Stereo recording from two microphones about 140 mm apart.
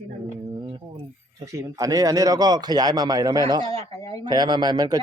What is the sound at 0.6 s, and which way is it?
Speech, 35° right (ahead or behind).